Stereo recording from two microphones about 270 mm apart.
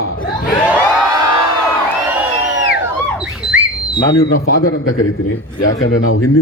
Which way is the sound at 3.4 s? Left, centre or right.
Centre.